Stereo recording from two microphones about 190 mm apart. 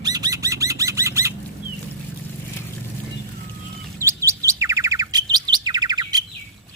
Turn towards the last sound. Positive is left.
turn(degrees=-20)  # may be behind; listen again after turning